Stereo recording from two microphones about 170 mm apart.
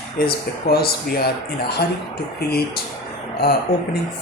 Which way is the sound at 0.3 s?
65° left (ahead or behind).